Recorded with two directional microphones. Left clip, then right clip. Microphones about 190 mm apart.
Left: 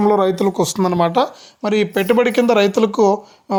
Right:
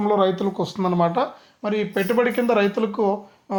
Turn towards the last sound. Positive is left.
turn(degrees=40)  # may be behind; listen again after turning